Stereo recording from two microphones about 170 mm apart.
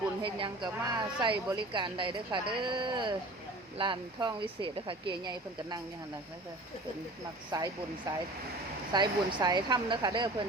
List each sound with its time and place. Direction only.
0.2 s a woman's voice: 30° right (ahead or behind)
7.5 s a woman's voice: 20° right (ahead or behind)